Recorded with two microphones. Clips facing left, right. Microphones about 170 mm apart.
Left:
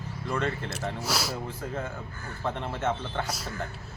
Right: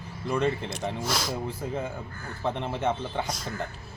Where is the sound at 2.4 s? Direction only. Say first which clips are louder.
Right 2 dB; 15° right (ahead or behind).